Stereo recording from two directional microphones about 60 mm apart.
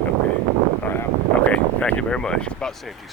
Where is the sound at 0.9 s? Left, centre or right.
Left.